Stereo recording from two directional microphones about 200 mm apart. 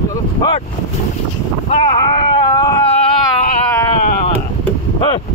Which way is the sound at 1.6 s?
30° left (ahead or behind).